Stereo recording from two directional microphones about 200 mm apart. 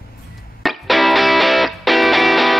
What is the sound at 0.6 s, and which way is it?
Music, centre (ahead or behind).